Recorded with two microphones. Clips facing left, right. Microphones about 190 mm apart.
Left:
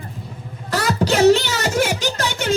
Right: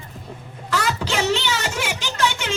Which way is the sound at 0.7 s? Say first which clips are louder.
Left 5 dB; 40° left (ahead or behind).